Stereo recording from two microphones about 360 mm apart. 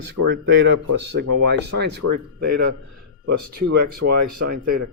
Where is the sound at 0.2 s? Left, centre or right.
Right.